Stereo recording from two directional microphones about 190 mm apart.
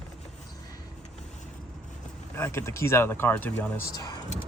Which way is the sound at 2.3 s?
15° left (ahead or behind).